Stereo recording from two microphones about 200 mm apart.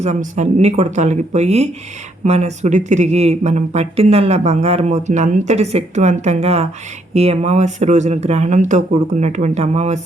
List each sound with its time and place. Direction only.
0.0 s speech: 35° right (ahead or behind)